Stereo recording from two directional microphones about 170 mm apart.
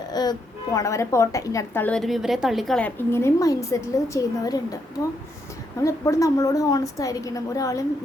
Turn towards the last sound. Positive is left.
turn(degrees=20)  # may be behind; listen again after turning